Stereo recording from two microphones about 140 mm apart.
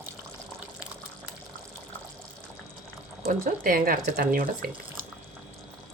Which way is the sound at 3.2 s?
80° right.